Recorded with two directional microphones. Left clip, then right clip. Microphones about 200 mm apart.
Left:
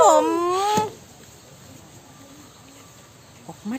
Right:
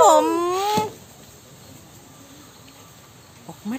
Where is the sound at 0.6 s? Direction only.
20° left (ahead or behind).